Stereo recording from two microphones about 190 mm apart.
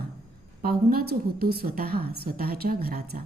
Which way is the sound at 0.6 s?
50° right (ahead or behind).